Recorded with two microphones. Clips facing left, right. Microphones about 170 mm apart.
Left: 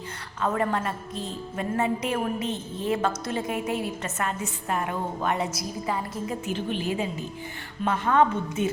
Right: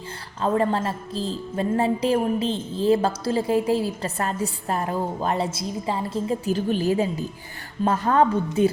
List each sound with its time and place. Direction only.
0.4 s a woman's voice: 30° right (ahead or behind)